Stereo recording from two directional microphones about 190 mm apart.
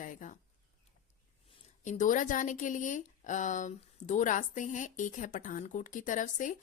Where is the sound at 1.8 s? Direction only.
40° left (ahead or behind).